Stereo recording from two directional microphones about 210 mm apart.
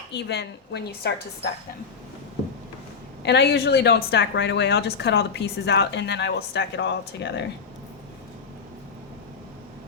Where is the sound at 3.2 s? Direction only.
55° left (ahead or behind).